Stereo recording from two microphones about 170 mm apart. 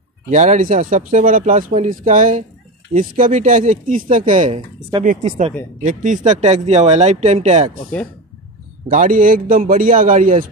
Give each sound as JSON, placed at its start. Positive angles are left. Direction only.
{"t": 0.3, "sound": "speech", "side_deg": -45}
{"t": 7.9, "sound": "speech", "side_deg": 10}
{"t": 8.9, "sound": "speech", "side_deg": -50}